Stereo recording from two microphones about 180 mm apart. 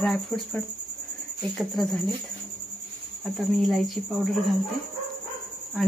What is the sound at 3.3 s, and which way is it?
Speech, centre (ahead or behind).